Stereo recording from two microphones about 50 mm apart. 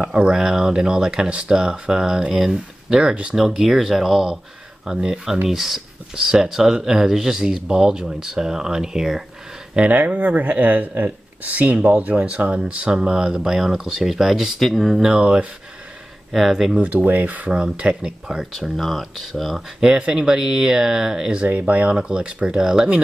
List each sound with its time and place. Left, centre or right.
0.0 s speech: right
9.8 s speech: right; by 15.1 s centre
15.1 s speech: right
16.3 s speech: centre
16.8 s speech: right
18.5 s speech: centre
19.8 s speech: centre
21.5 s speech: right